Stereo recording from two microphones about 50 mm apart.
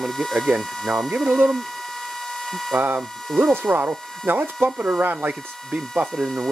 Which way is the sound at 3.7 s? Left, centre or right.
Right.